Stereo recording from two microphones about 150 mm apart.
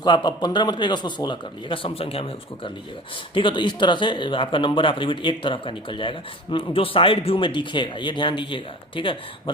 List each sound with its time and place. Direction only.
0.0 s a man's voice: 30° left (ahead or behind)